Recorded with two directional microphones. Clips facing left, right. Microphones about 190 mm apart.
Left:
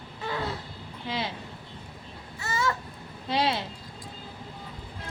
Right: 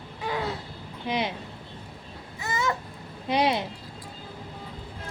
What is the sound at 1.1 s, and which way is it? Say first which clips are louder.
Speech: right 4 dB; 20° right (ahead or behind).